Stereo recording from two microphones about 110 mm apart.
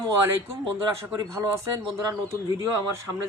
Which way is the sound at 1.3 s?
25° right (ahead or behind).